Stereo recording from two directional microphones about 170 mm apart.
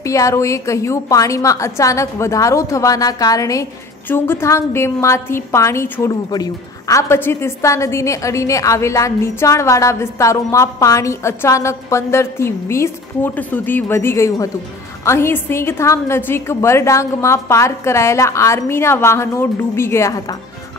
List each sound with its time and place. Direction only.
0.0 s a woman's voice: 20° left (ahead or behind)